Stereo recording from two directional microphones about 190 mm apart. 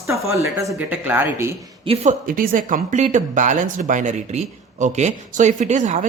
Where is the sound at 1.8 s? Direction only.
30° right (ahead or behind).